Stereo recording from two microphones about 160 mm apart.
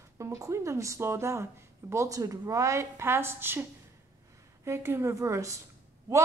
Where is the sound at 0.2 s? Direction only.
20° right (ahead or behind).